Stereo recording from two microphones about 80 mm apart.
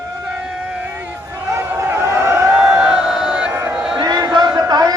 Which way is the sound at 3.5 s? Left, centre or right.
Right.